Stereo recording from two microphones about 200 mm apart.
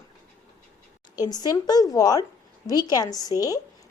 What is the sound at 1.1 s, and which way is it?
A woman's voice, 20° left (ahead or behind).